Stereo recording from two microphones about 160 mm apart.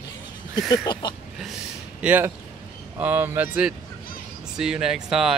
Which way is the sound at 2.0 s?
10° right (ahead or behind).